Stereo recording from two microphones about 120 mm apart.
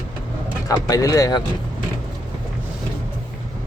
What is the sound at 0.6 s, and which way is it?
Speech, 30° left (ahead or behind).